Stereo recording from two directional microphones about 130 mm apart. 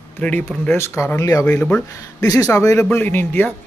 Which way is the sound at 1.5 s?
10° left (ahead or behind).